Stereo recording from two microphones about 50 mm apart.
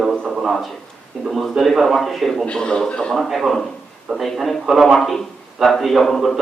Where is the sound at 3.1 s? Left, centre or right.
Centre.